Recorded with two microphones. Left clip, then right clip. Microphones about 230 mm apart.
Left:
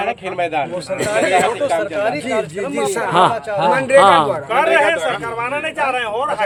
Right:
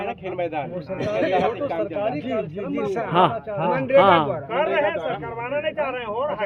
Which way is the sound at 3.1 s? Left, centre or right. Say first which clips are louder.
Left 5 dB; centre.